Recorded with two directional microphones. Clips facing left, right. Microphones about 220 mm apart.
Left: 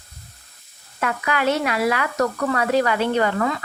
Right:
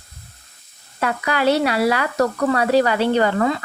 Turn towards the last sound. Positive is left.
turn(degrees=-30)  # may be behind; listen again after turning